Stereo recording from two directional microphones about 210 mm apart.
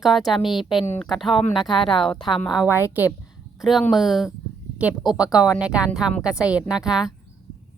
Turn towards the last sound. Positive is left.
turn(degrees=-5)  # may be behind; listen again after turning